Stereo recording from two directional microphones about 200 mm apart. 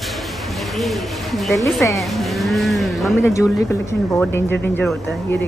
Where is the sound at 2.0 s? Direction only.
Centre (ahead or behind).